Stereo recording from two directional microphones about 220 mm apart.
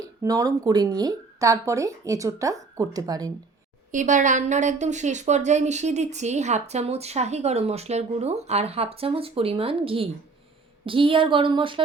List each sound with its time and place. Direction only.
0.0 s speech: 15° right (ahead or behind)
3.9 s a woman's voice: 35° right (ahead or behind)